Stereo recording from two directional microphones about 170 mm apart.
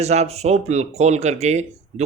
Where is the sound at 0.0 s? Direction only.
40° right (ahead or behind).